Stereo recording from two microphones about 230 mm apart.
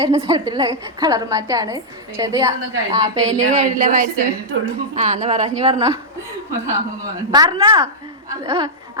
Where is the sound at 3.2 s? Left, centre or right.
Right.